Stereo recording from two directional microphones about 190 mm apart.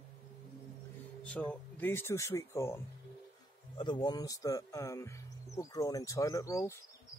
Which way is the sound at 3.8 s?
25° left (ahead or behind).